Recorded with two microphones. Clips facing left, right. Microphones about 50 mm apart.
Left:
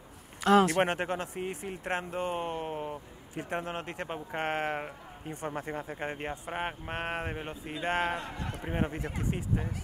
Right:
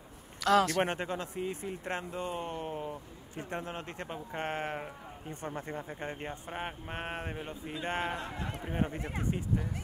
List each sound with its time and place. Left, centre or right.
0.4 s speech: left
0.8 s speech: left
4.3 s speech: left
5.3 s speech: centre
6.5 s speech: left
7.9 s speech: left
8.6 s speech: left